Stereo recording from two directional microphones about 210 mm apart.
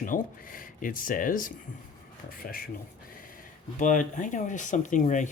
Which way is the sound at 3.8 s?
35° left (ahead or behind).